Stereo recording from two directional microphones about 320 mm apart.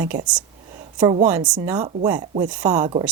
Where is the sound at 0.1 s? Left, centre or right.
Right.